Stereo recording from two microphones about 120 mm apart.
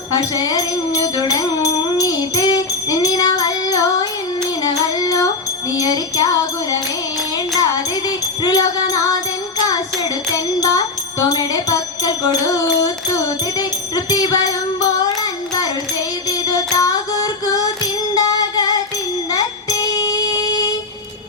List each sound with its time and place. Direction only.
0.2 s music: 30° left (ahead or behind)
10.3 s music: 25° left (ahead or behind)
13.6 s jingle bell: 30° left (ahead or behind)
15.2 s music: 35° left (ahead or behind)